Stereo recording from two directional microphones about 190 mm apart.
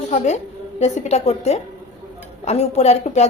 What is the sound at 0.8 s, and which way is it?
A woman's voice, 35° left (ahead or behind).